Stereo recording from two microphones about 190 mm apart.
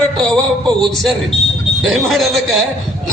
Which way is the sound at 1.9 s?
Centre (ahead or behind).